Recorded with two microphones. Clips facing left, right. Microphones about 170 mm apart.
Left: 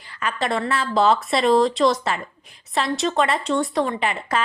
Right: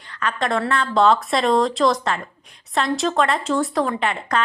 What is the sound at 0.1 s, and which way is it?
Speech, 5° left (ahead or behind).